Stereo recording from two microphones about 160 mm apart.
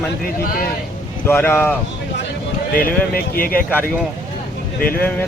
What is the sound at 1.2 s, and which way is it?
Speech, 15° left (ahead or behind).